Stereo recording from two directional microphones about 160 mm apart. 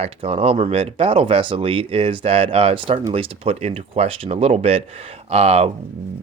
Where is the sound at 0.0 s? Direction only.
35° right (ahead or behind).